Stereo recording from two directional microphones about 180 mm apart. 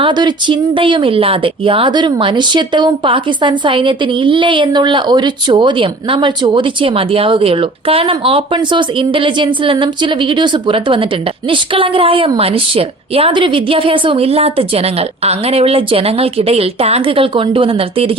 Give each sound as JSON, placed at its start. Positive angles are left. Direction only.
{"t": 0.0, "sound": "a woman's voice", "side_deg": -25}